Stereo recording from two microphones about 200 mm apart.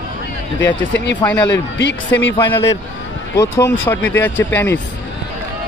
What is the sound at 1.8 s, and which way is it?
Speech, 65° left (ahead or behind).